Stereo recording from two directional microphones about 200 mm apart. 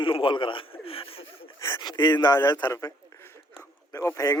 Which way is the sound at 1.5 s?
15° left (ahead or behind).